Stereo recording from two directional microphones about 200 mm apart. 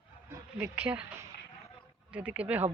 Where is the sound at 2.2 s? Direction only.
5° right (ahead or behind).